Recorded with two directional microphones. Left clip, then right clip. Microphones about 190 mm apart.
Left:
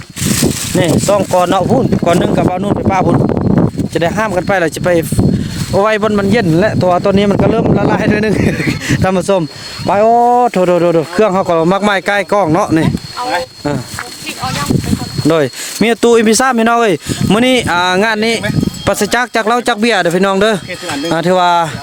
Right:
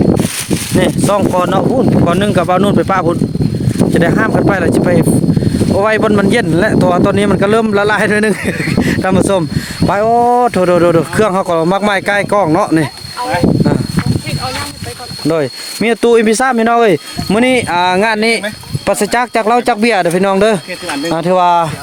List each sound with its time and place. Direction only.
0.8 s speech: centre (ahead or behind)
15.3 s speech: 20° left (ahead or behind)